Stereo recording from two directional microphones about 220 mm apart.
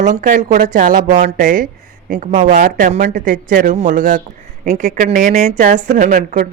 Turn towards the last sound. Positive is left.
turn(degrees=-35)  # may be behind; listen again after turning